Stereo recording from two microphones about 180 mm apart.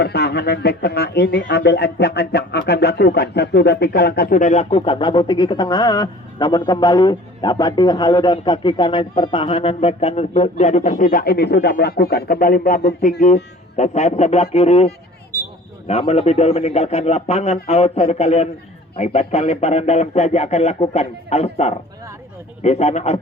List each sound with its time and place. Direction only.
0.0 s speech: 65° left (ahead or behind); by 23.2 s 35° left (ahead or behind)